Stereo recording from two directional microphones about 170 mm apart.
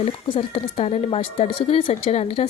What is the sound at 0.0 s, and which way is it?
Speech, 35° left (ahead or behind).